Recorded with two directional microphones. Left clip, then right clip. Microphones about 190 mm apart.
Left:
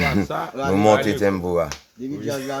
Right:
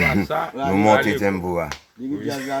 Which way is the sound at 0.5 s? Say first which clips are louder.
Left 2 dB; 20° left (ahead or behind).